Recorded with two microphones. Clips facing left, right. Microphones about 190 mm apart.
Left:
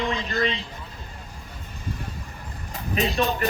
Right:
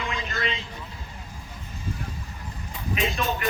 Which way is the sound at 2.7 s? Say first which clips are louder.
Left 3 dB; 40° left (ahead or behind).